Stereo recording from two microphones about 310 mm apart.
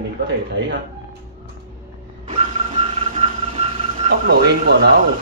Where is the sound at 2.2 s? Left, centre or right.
Right.